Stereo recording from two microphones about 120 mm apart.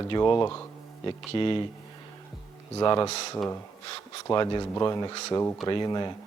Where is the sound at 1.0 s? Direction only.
45° left (ahead or behind).